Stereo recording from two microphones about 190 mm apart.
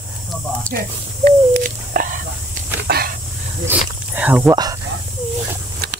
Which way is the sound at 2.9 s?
55° right (ahead or behind).